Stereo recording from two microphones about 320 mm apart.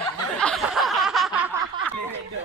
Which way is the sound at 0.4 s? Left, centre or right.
Centre.